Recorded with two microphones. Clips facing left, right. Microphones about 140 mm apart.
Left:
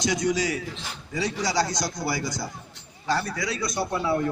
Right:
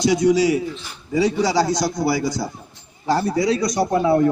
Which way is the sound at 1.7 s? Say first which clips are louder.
Right 8 dB; 10° right (ahead or behind).